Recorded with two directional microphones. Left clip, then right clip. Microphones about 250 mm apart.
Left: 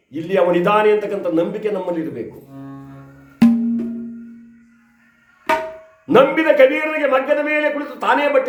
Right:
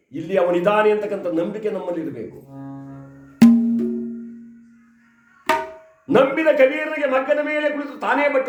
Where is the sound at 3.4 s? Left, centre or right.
Right.